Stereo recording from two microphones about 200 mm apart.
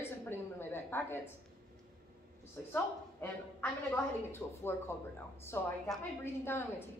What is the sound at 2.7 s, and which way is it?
A woman's voice, 10° left (ahead or behind).